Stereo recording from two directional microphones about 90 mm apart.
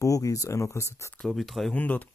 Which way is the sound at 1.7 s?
15° left (ahead or behind).